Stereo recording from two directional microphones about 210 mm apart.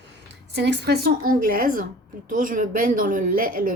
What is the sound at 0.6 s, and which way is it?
A woman's voice, 55° right (ahead or behind).